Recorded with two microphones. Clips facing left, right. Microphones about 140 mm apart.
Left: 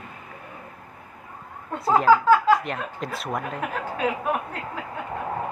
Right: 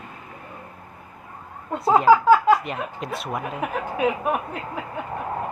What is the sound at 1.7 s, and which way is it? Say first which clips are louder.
Speech: right 2 dB; centre (ahead or behind).